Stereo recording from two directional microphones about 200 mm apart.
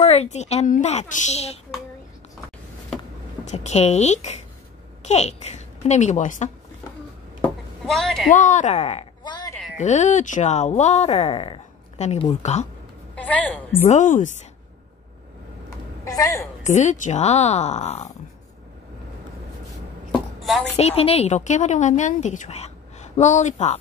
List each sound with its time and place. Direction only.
0.0 s a woman's voice: 30° left (ahead or behind)
3.5 s a woman's voice: 35° left (ahead or behind)
7.4 s a sound: centre (ahead or behind)
8.4 s a woman's voice: 35° left (ahead or behind); by 9.5 s 20° left (ahead or behind)
9.8 s a woman's voice: 35° left (ahead or behind)
13.1 s a woman's voice: 5° left (ahead or behind)
13.8 s a woman's voice: 35° left (ahead or behind)
16.0 s a woman's voice: 15° left (ahead or behind)
16.6 s a woman's voice: 35° left (ahead or behind)
20.1 s a sound: centre (ahead or behind)
20.7 s a woman's voice: 30° left (ahead or behind)